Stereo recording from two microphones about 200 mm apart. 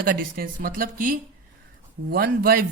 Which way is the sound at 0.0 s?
45° right (ahead or behind).